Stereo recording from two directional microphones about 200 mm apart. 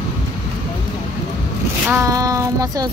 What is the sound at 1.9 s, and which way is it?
Child singing, 15° right (ahead or behind).